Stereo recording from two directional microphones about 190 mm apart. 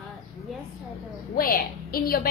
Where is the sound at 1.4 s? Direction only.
50° left (ahead or behind).